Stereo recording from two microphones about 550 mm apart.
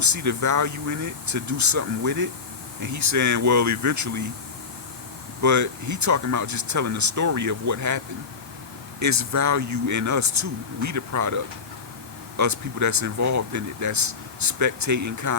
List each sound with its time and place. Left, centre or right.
0.0 s speech: right
5.4 s speech: right
12.4 s speech: right